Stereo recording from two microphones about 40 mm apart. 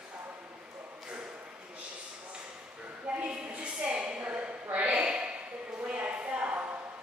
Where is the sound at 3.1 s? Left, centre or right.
Right.